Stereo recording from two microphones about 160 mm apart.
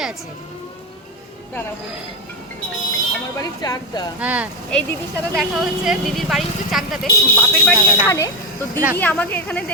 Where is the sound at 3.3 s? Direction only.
20° left (ahead or behind).